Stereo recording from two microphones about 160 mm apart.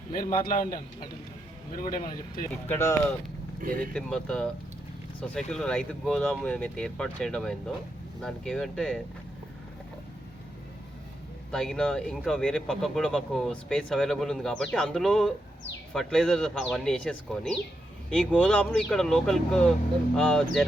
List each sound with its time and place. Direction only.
0.1 s a man's voice: 60° left (ahead or behind)
2.6 s speech: 15° left (ahead or behind)
3.6 s speech: 55° right (ahead or behind)
3.9 s speech: 5° left (ahead or behind)
11.5 s speech: 5° left (ahead or behind)